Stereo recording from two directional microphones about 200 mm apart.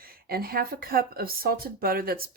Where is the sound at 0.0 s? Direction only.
50° right (ahead or behind).